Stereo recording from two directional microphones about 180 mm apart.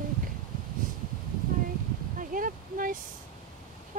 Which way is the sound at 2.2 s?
50° right (ahead or behind).